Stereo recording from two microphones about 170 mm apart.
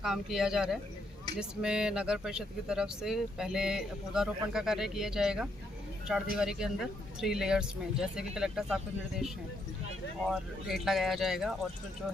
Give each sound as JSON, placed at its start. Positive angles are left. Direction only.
{"t": 0.0, "sound": "speech", "side_deg": -5}